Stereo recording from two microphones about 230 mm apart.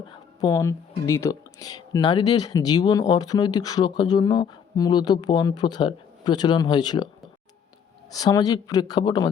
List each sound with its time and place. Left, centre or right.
0.3 s speech: centre
8.1 s speech: centre